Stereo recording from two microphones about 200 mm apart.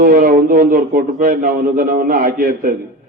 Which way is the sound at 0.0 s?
45° right (ahead or behind).